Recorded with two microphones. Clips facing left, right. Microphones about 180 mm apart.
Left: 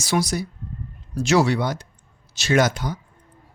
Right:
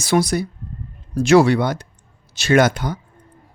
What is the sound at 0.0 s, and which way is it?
Speech, 55° right (ahead or behind).